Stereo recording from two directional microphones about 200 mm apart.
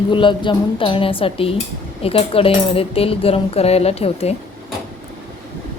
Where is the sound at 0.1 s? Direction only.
25° left (ahead or behind).